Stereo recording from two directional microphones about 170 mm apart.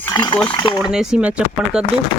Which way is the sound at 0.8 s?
5° right (ahead or behind).